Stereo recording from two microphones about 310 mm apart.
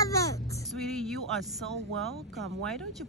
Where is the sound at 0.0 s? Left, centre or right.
Centre.